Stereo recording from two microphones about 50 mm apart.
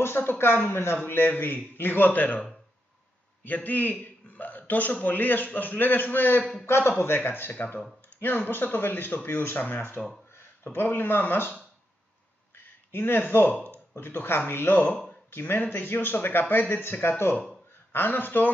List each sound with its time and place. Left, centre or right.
0.0 s a man's voice: left
3.4 s a man's voice: left
4.0 s hiccup: left
5.0 s a man's voice: left
9.6 s a man's voice: left
10.3 s speech: left
12.5 s a sound: left
13.9 s a man's voice: left